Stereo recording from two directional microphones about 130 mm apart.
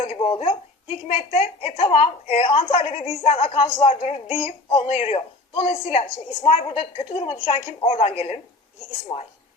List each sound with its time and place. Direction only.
0.0 s a woman's voice: 50° left (ahead or behind)
9.1 s a woman's voice: 35° left (ahead or behind)